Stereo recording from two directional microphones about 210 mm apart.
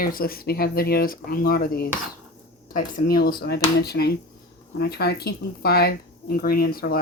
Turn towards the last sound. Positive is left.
turn(degrees=45)  # may be behind; listen again after turning